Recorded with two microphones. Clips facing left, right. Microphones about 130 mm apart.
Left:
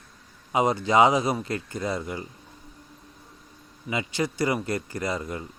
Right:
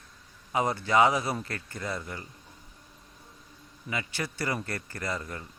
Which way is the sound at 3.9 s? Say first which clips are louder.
Left 6 dB; 20° left (ahead or behind).